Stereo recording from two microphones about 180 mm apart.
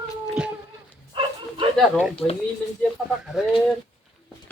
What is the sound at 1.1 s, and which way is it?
Bow-wow, 25° right (ahead or behind).